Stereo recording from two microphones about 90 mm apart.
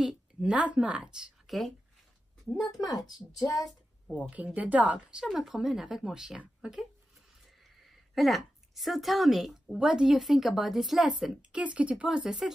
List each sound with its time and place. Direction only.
0.0 s a woman's voice: 10° right (ahead or behind)
3.3 s speech: 40° left (ahead or behind)
4.2 s a woman's voice: 15° right (ahead or behind)